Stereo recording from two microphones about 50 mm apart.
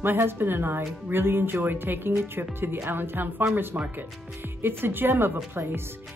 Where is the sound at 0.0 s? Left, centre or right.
Right.